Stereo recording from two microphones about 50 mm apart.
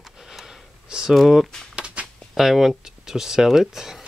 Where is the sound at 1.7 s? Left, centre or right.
Right.